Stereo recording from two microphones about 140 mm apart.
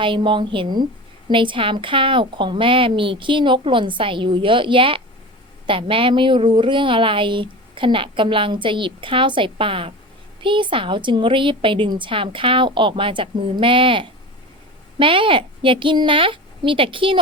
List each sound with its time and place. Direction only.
0.0 s speech: 35° right (ahead or behind)